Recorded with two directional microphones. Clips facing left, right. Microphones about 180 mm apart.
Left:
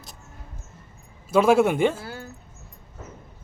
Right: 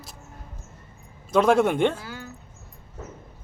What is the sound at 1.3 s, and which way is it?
Speech, 5° left (ahead or behind).